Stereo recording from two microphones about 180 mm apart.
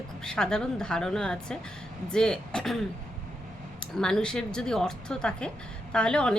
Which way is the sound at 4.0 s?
5° left (ahead or behind).